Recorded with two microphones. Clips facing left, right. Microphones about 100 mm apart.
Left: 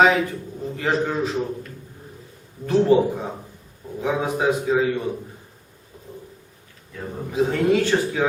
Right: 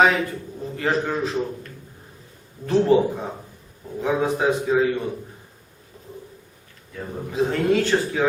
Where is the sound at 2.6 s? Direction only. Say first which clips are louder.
Left 1 dB; 5° left (ahead or behind).